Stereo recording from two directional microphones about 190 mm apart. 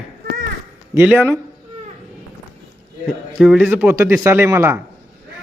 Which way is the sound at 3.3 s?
5° right (ahead or behind).